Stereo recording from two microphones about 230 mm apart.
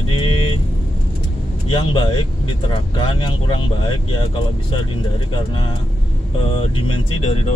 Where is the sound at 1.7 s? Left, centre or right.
Centre.